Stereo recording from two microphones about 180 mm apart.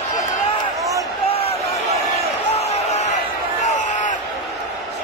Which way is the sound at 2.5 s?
35° left (ahead or behind).